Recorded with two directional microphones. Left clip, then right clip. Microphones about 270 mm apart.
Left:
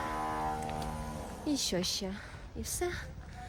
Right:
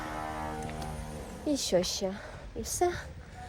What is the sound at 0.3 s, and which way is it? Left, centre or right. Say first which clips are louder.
Music: left 2 dB; left.